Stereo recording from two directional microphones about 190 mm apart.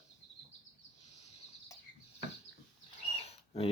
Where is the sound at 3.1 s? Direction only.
30° left (ahead or behind).